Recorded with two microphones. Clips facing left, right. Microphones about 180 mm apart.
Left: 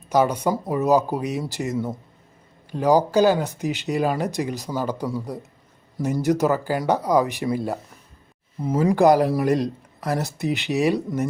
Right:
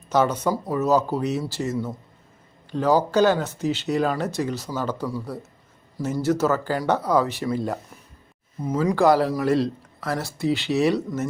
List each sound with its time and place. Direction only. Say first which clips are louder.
0.1 s speech: left 1 dB; 10° left (ahead or behind)
8.8 s speech: left 2 dB; 15° left (ahead or behind)